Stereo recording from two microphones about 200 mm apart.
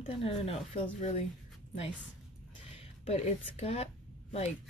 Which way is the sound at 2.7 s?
30° left (ahead or behind).